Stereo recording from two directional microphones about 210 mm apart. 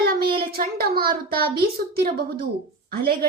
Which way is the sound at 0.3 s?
45° right (ahead or behind).